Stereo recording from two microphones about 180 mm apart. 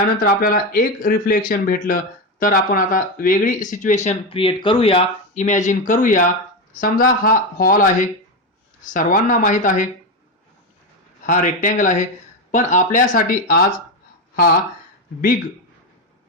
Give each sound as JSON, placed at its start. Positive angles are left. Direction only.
{"t": 0.0, "sound": "speech", "side_deg": 50}
{"t": 5.3, "sound": "speech", "side_deg": 40}
{"t": 11.3, "sound": "speech", "side_deg": 45}